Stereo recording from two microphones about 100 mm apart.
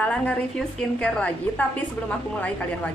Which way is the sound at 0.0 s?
15° left (ahead or behind).